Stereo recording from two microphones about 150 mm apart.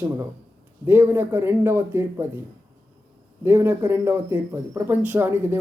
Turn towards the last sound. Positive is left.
turn(degrees=-15)  # may be behind; listen again after turning